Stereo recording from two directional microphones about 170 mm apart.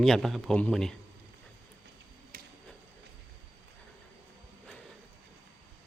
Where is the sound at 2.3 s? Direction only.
60° right (ahead or behind).